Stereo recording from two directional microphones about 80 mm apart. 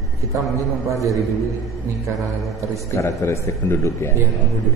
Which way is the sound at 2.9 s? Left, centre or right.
Left.